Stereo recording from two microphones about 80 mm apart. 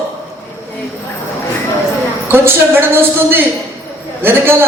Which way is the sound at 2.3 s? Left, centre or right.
Right.